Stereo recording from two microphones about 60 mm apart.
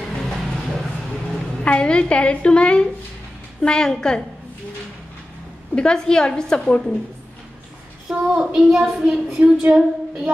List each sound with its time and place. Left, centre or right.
0.2 s a sound: centre
1.6 s a woman's voice: centre
5.8 s a woman's voice: centre
8.1 s child singing: centre